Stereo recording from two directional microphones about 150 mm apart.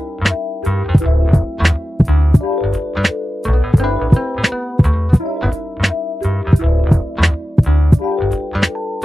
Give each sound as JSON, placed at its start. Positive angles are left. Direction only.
{"t": 0.2, "sound": "music", "side_deg": 0}